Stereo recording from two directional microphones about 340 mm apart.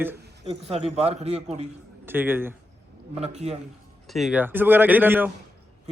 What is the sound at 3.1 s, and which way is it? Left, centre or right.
Speech, centre.